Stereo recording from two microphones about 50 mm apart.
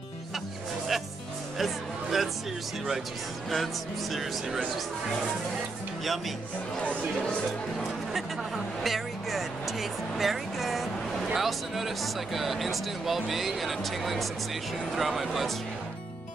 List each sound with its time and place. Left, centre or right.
1.6 s music: centre
3.4 s speech: centre
6.8 s speech: left
8.1 s vehicle: centre
11.3 s speech: centre